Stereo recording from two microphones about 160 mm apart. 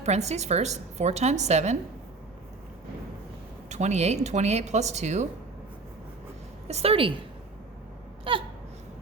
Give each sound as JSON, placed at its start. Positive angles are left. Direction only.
{"t": 0.0, "sound": "a woman's voice", "side_deg": -45}
{"t": 3.7, "sound": "a woman's voice", "side_deg": -45}
{"t": 6.7, "sound": "a woman's voice", "side_deg": -40}
{"t": 8.2, "sound": "a sound", "side_deg": -35}